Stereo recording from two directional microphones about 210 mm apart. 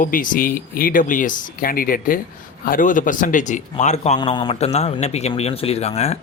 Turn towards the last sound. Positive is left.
turn(degrees=30)  # may be behind; listen again after turning